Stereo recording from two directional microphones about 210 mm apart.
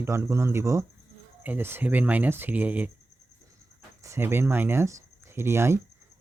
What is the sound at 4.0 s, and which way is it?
Speech, 15° right (ahead or behind).